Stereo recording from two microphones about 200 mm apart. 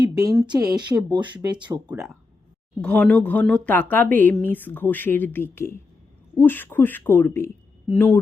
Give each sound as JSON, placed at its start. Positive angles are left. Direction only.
{"t": 0.1, "sound": "speech", "side_deg": -15}
{"t": 1.9, "sound": "speech", "side_deg": 0}